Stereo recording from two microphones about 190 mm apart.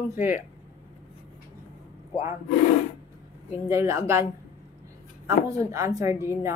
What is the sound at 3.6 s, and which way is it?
Speech, 15° right (ahead or behind).